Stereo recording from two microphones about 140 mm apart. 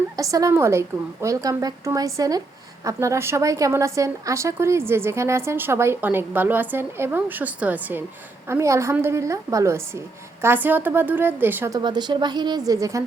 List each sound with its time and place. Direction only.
0.2 s a woman's voice: 25° right (ahead or behind)
11.7 s a woman's voice: 30° right (ahead or behind)